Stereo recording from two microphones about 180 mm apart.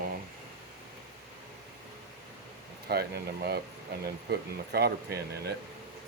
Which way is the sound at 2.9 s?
60° right (ahead or behind).